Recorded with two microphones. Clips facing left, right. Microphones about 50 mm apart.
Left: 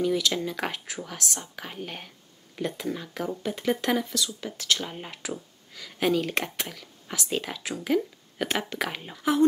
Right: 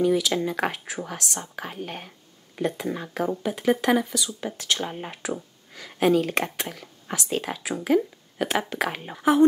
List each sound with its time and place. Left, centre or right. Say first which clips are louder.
0.0 s speech: right 4 dB; centre
2.6 s speech: right 3 dB; right
3.5 s speech: right 5 dB; centre
5.3 s a sound: right 4 dB; right
5.9 s speech: right 4 dB; centre
9.1 s speech: right 4 dB; right